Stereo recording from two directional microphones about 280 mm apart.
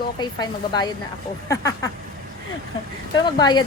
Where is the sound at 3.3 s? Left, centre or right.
Centre.